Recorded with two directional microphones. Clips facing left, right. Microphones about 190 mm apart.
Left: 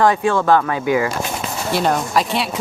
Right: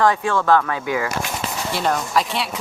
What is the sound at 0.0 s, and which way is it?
Speech, 15° left (ahead or behind).